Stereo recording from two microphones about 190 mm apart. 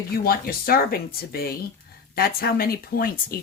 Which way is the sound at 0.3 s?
50° left (ahead or behind).